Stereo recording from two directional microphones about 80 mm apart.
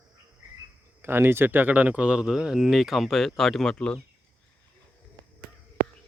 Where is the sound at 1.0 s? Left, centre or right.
Right; by 4.0 s centre.